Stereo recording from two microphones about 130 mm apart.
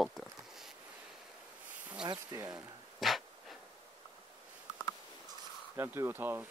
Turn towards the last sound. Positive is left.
turn(degrees=-15)  # may be behind; listen again after turning